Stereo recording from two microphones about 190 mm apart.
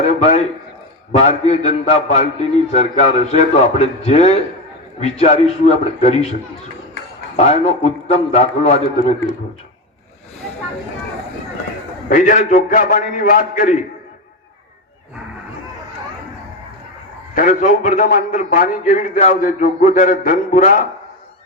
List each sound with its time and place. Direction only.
0.2 s a man's voice: 35° left (ahead or behind)
7.3 s a man's voice: 35° left (ahead or behind)
12.0 s a man's voice: 45° left (ahead or behind)
17.3 s a man's voice: 45° left (ahead or behind)